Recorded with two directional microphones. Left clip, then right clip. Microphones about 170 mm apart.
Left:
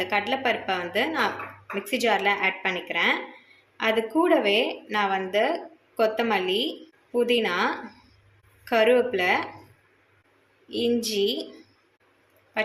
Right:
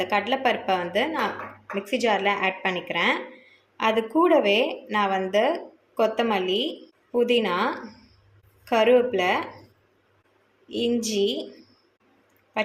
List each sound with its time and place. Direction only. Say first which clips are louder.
0.0 s a woman's voice: right 2 dB; 15° right (ahead or behind)
10.7 s a woman's voice: even; 10° right (ahead or behind)